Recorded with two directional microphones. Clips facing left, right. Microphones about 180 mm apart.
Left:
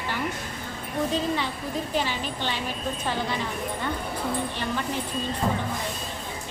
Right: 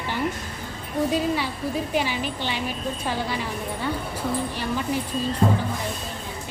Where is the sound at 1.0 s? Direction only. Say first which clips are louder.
Right 3 dB; 10° right (ahead or behind).